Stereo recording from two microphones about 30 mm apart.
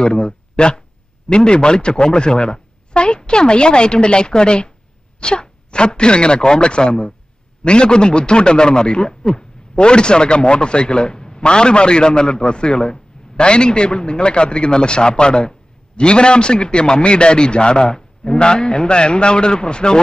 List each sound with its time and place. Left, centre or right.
0.0 s a man's voice: left